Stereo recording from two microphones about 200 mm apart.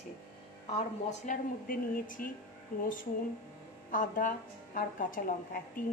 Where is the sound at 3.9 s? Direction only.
40° left (ahead or behind).